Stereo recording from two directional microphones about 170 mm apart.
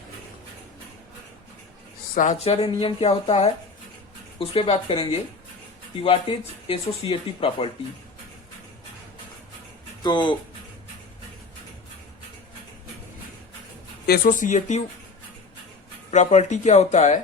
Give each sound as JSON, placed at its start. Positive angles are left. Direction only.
{"t": 2.1, "sound": "speech", "side_deg": 45}
{"t": 10.0, "sound": "speech", "side_deg": 25}
{"t": 14.3, "sound": "speech", "side_deg": 45}
{"t": 16.1, "sound": "speech", "side_deg": 45}